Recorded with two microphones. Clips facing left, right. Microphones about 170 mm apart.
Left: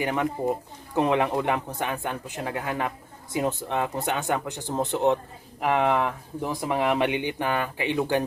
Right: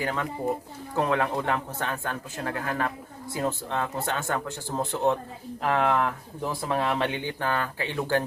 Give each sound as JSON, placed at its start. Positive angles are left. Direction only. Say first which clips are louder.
{"t": 0.0, "sound": "speech", "louder": "left 3 dB", "side_deg": 20}